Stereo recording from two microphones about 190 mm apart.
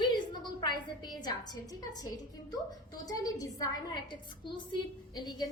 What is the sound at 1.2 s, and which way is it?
A woman's voice, 20° left (ahead or behind).